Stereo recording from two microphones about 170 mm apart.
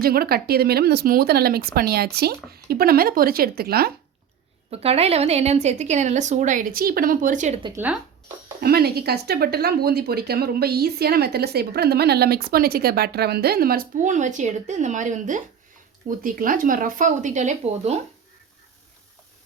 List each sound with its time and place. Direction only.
0.0 s speech: 65° right (ahead or behind)
4.7 s a woman's voice: 35° right (ahead or behind)
8.6 s a woman's voice: 65° right (ahead or behind); by 18.0 s 40° right (ahead or behind)